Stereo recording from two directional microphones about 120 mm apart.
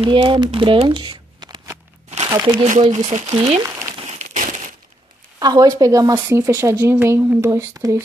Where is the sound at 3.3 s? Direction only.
55° right (ahead or behind).